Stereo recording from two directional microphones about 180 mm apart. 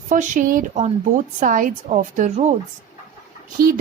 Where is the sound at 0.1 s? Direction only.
45° right (ahead or behind).